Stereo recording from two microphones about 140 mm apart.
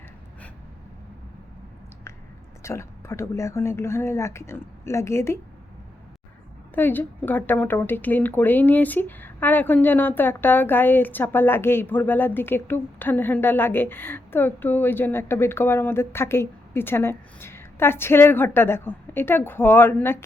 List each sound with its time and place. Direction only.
2.6 s speech: 20° left (ahead or behind)
6.7 s a woman's voice: 15° left (ahead or behind)